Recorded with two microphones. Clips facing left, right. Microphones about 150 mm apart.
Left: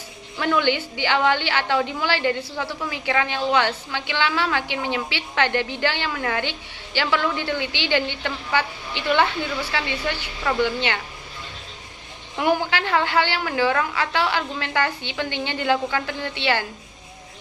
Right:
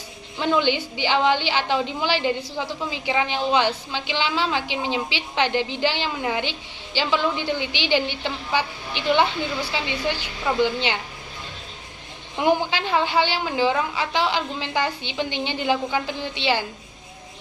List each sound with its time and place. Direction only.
0.3 s a woman's voice: 20° right (ahead or behind)
12.4 s a woman's voice: 20° right (ahead or behind)